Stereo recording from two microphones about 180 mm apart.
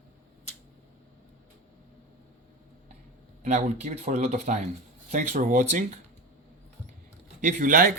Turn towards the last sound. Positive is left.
turn(degrees=-50)  # may be behind; listen again after turning